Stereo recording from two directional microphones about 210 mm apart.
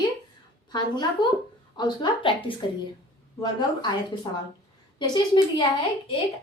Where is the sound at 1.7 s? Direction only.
20° left (ahead or behind).